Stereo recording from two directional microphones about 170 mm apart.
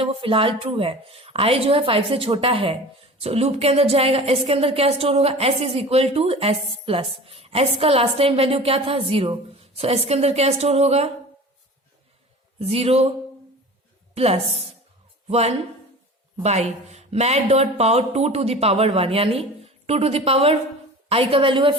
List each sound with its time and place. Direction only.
0.0 s a woman's voice: 30° right (ahead or behind)
12.5 s a woman's voice: 35° right (ahead or behind)